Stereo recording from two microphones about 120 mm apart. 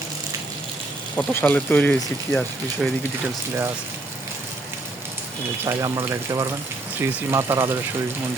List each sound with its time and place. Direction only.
1.1 s speech: 15° left (ahead or behind)
5.6 s speech: 25° right (ahead or behind)